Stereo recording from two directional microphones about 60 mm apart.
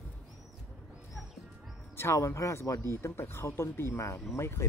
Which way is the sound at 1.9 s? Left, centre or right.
Left.